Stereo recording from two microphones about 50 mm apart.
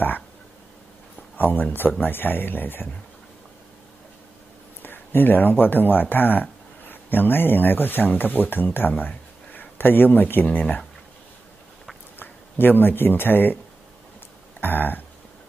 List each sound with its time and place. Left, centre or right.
1.3 s speech: left
4.8 s speech: left
12.2 s speech: left
14.6 s a sound: left